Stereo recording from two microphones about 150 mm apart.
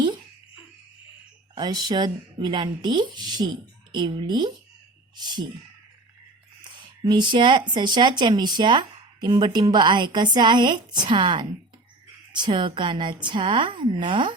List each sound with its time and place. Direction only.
1.5 s speech: 30° right (ahead or behind)
7.0 s speech: 30° right (ahead or behind)